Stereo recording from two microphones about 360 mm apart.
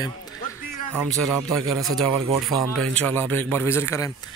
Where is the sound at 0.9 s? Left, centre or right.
Centre.